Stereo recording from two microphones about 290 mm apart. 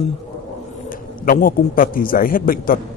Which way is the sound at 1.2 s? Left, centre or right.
Left.